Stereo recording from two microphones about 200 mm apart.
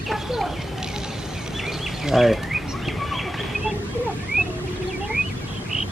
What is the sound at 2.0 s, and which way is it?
Bird, centre (ahead or behind).